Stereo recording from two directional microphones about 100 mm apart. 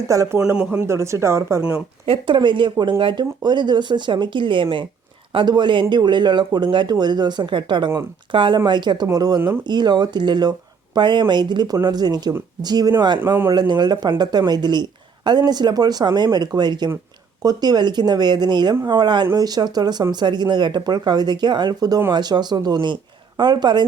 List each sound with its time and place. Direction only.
0.1 s speech: 30° right (ahead or behind)
0.4 s speech: 10° right (ahead or behind)
0.7 s speech: 25° right (ahead or behind)
2.0 s speech: 55° right (ahead or behind)
13.1 s speech: 20° right (ahead or behind)
13.5 s speech: 45° right (ahead or behind)